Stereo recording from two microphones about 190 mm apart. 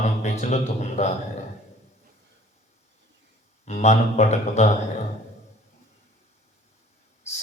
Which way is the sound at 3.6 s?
35° left (ahead or behind).